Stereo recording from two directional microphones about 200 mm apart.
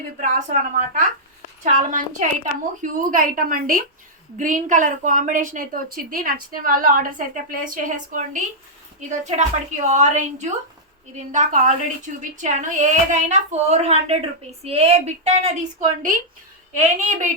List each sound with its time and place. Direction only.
0.2 s a woman's voice: 40° right (ahead or behind)